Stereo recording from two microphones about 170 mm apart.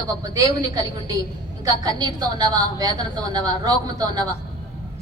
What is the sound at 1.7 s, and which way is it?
A woman's voice, 20° right (ahead or behind).